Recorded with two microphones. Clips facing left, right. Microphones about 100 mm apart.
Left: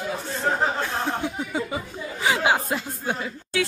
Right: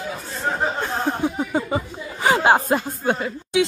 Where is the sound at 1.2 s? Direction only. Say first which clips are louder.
Right 5 dB; 45° right (ahead or behind).